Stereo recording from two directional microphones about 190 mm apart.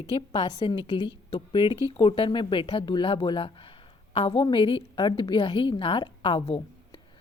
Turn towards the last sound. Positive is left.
turn(degrees=30)  # may be behind; listen again after turning